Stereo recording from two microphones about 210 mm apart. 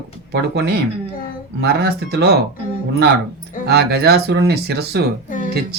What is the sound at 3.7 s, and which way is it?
Speech, 50° right (ahead or behind).